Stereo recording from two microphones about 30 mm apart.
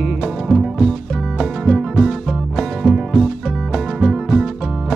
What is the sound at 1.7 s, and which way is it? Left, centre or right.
Music, centre.